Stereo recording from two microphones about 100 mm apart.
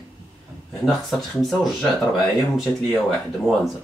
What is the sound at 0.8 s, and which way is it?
Speech, centre (ahead or behind).